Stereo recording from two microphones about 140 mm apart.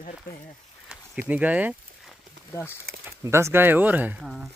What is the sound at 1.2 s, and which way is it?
Speech, 10° right (ahead or behind).